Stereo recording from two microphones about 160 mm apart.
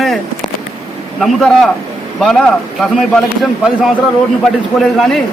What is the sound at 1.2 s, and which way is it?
A man's voice, centre (ahead or behind).